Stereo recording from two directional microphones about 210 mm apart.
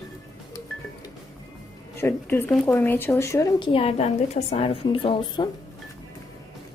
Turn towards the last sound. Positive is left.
turn(degrees=25)  # may be behind; listen again after turning